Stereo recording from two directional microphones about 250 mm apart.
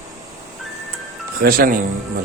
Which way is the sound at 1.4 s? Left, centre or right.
Right.